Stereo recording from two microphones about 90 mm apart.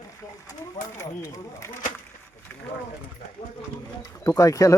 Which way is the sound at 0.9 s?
35° left (ahead or behind).